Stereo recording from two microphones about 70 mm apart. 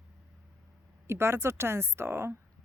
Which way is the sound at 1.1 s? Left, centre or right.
Right.